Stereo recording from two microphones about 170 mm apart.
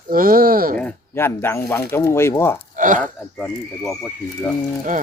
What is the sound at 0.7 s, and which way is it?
Speech, 10° left (ahead or behind).